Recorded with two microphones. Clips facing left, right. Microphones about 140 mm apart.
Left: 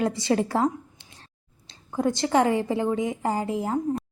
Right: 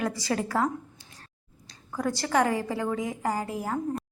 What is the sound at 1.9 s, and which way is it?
A woman's voice, 25° left (ahead or behind).